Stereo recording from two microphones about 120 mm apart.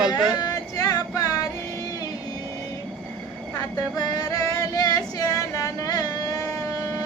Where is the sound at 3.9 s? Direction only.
35° left (ahead or behind).